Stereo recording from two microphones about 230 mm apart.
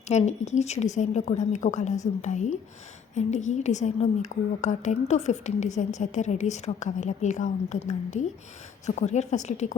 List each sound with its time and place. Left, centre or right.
0.1 s a woman's voice: left